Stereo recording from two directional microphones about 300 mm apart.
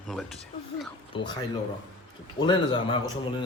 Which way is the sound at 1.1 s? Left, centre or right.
Centre.